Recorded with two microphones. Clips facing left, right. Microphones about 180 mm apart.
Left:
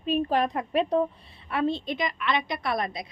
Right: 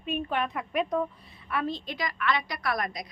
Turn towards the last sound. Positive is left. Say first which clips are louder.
# left 2 dB
turn(degrees=25)  # may be behind; listen again after turning